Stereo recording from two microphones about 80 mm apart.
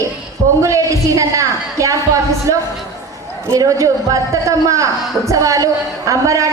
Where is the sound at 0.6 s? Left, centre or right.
Right.